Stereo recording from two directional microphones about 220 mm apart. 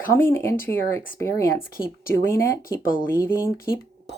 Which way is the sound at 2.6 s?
40° left (ahead or behind).